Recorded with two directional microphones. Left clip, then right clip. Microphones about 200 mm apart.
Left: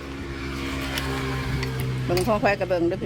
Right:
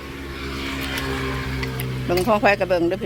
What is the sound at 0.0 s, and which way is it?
Vehicle, 40° left (ahead or behind).